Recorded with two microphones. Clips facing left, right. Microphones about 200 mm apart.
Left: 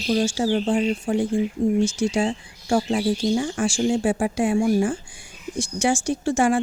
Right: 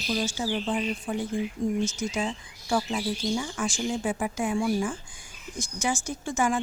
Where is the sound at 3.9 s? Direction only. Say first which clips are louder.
Left 8 dB; 80° left.